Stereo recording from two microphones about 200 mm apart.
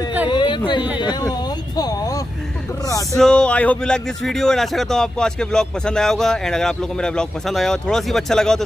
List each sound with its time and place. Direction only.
0.3 s a sound: 25° left (ahead or behind)
0.9 s speech: 20° left (ahead or behind)
3.2 s speech: 5° left (ahead or behind)